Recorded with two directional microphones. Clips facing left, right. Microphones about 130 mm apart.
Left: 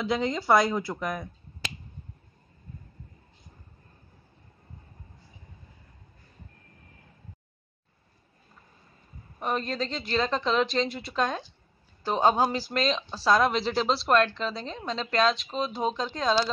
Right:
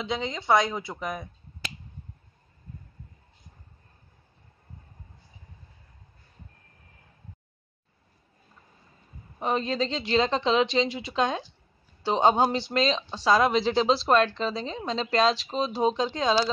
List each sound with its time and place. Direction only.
0.0 s speech: 5° left (ahead or behind)
9.4 s speech: centre (ahead or behind)
12.4 s speech: 25° right (ahead or behind)
12.6 s speech: centre (ahead or behind)